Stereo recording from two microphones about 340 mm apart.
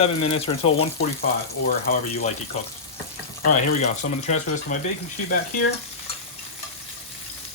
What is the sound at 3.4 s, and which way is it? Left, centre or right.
Speech, left.